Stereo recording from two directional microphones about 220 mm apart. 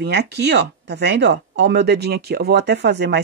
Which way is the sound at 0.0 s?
50° right (ahead or behind).